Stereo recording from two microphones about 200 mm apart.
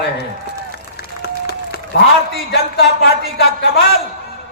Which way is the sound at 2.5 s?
55° left (ahead or behind).